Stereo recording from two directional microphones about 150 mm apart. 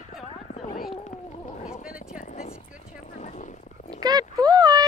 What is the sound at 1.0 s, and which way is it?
Speech, 55° left (ahead or behind).